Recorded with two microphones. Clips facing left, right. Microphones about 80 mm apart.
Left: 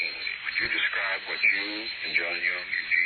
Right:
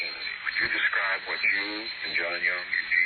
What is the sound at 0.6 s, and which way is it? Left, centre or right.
Speech, right.